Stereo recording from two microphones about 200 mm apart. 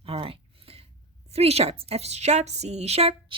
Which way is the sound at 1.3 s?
30° right (ahead or behind).